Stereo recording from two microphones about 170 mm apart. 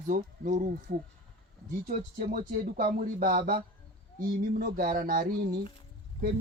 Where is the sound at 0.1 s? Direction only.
50° right (ahead or behind).